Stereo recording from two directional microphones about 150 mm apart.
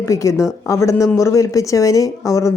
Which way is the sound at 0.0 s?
20° left (ahead or behind).